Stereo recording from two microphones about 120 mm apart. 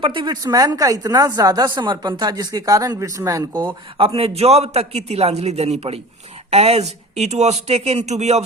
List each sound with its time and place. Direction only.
0.0 s speech: 45° right (ahead or behind); by 8.4 s 65° right (ahead or behind)